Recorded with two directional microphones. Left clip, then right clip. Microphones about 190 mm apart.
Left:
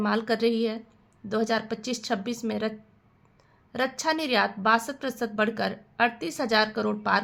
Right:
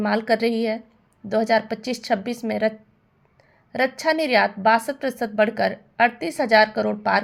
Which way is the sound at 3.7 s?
10° right (ahead or behind).